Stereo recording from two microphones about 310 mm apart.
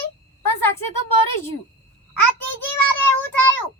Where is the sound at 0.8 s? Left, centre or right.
Left.